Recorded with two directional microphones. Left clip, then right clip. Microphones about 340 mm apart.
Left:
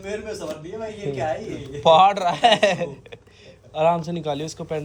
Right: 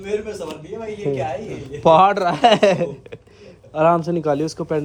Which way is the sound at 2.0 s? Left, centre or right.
Centre.